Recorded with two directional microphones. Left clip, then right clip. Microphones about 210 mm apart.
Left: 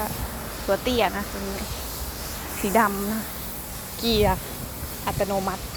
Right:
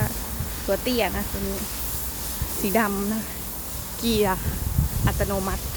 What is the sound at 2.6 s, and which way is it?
Speech, 10° right (ahead or behind).